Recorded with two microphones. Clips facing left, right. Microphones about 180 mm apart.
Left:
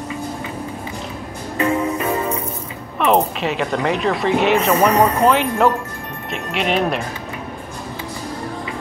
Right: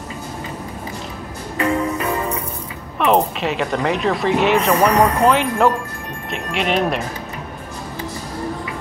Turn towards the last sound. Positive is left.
turn(degrees=0)  # may be behind; listen again after turning